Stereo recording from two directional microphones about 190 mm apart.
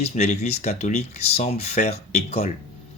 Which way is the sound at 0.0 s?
35° left (ahead or behind).